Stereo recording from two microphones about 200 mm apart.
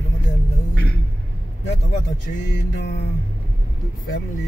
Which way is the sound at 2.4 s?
60° left (ahead or behind).